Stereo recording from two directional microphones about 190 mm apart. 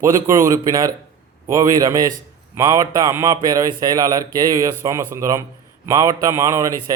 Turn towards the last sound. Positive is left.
turn(degrees=-15)  # may be behind; listen again after turning